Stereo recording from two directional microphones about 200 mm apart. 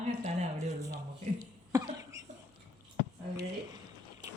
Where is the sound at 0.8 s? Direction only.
15° right (ahead or behind).